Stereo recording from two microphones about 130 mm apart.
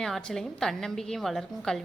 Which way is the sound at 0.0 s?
5° left (ahead or behind).